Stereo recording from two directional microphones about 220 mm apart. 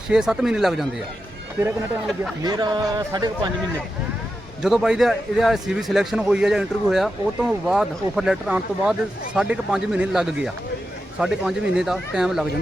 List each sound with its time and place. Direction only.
0.1 s a man's voice: 5° right (ahead or behind)
2.4 s speech: 20° right (ahead or behind)
4.6 s a man's voice: centre (ahead or behind)